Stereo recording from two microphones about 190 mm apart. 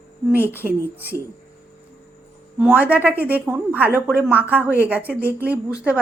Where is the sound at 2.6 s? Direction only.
10° right (ahead or behind).